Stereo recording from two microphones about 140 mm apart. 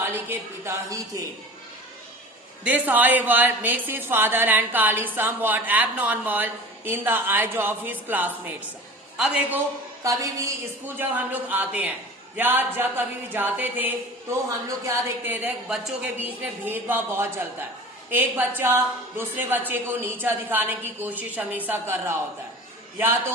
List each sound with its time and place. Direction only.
0.0 s a man's voice: 15° right (ahead or behind)
2.6 s speech: 10° right (ahead or behind)
10.0 s speech: 25° right (ahead or behind)